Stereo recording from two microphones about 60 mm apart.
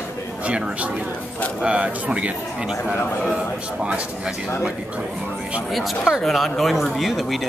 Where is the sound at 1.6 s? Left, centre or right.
Centre.